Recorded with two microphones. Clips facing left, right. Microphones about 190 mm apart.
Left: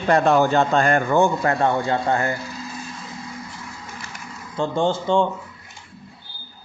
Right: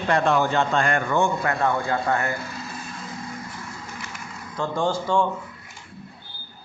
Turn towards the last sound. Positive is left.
turn(degrees=25)  # may be behind; listen again after turning